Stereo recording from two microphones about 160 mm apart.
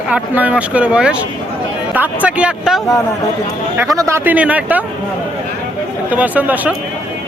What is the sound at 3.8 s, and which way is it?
Speech, 20° right (ahead or behind).